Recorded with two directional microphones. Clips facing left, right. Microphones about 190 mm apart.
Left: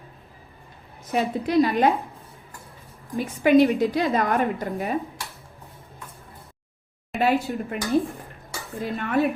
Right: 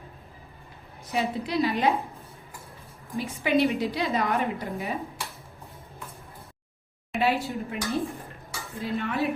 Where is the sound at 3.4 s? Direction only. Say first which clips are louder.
Left 7 dB; 50° left (ahead or behind).